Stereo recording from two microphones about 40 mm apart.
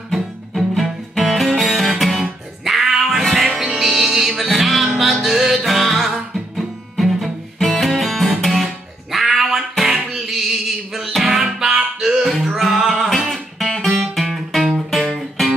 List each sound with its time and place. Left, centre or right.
0.1 s music: centre
8.4 s guitar: centre
9.1 s music: centre
12.3 s music: centre
13.3 s music: centre